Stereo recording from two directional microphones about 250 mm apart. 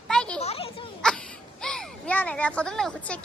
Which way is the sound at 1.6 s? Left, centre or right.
Centre.